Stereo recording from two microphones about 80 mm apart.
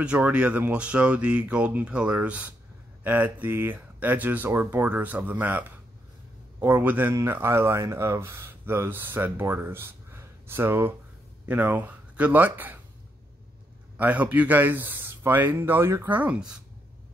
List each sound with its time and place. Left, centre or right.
0.0 s speech: centre
13.9 s speech: centre
16.1 s speech: centre